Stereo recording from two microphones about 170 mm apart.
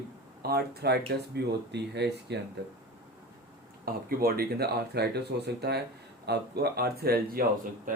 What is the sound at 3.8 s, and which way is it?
Speech, 60° right (ahead or behind).